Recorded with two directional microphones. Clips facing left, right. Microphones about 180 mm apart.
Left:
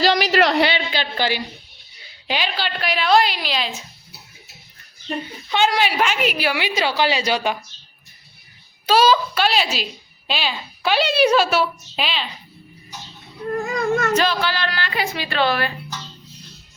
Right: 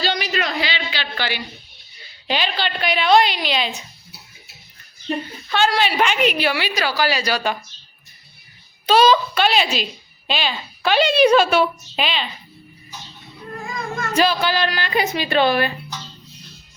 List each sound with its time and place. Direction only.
0.0 s a sound: 90° left; by 0.7 s 75° left (ahead or behind)
1.1 s a woman's voice: 40° left (ahead or behind)
2.2 s a woman's voice: 10° left (ahead or behind)
5.5 s a woman's voice: 15° left (ahead or behind)
8.9 s a woman's voice: 5° left (ahead or behind)
13.7 s cat: 70° left (ahead or behind)
14.1 s a woman's voice: 10° right (ahead or behind)